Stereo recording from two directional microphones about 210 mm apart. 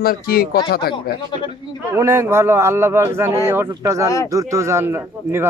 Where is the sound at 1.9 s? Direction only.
15° right (ahead or behind).